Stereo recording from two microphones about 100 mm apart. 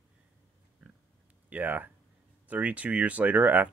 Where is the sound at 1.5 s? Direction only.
15° right (ahead or behind).